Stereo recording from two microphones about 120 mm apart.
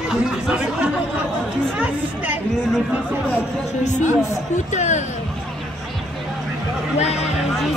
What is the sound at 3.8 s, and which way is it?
Speech, 90° left.